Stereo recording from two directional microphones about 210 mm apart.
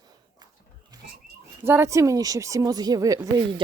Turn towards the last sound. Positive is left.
turn(degrees=-20)  # may be behind; listen again after turning